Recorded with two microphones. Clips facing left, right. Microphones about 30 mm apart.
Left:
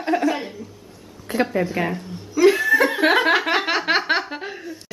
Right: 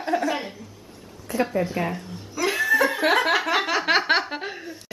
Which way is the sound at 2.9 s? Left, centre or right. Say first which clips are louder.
Left 3 dB; left.